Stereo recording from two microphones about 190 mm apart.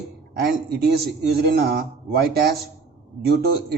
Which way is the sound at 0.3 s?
55° right (ahead or behind).